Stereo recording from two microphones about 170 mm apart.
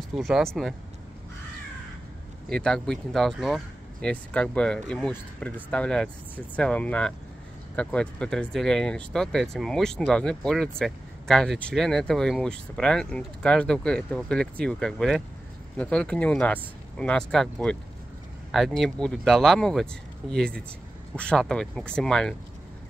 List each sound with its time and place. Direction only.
0.2 s speech: centre (ahead or behind)
2.5 s speech: 5° left (ahead or behind)